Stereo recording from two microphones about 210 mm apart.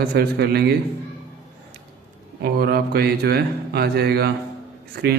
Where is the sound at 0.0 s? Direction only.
50° right (ahead or behind).